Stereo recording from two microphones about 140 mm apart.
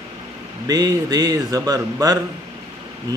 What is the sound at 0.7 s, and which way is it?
Speech, 30° right (ahead or behind).